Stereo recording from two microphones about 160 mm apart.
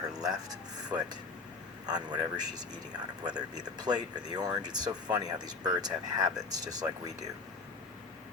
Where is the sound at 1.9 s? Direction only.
25° right (ahead or behind).